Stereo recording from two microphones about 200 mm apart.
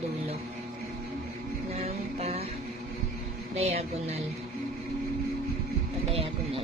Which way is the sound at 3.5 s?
30° right (ahead or behind).